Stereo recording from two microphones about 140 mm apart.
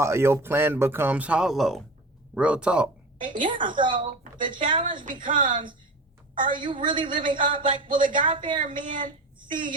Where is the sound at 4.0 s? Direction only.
70° right (ahead or behind).